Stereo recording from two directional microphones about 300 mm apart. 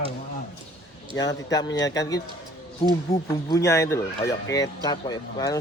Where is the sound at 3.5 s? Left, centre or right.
Centre.